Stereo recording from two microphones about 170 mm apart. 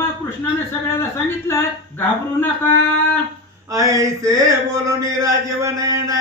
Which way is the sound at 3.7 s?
20° right (ahead or behind).